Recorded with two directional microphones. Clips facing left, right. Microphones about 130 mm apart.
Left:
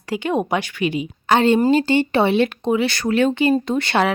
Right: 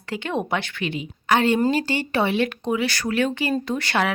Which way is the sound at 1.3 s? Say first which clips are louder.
Left 4 dB; 25° left (ahead or behind).